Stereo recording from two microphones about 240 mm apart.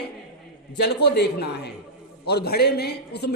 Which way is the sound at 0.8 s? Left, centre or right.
Left.